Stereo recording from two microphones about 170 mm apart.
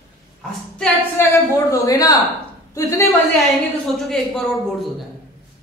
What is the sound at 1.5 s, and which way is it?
A woman's voice, 20° left (ahead or behind).